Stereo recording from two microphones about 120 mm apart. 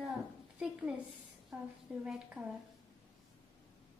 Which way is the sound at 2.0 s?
5° right (ahead or behind).